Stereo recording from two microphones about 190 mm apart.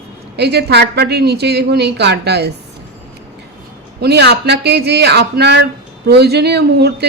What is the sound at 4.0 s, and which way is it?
A man's voice, 60° right (ahead or behind).